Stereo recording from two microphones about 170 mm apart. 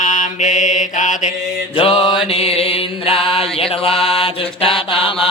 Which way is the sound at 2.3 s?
35° left (ahead or behind).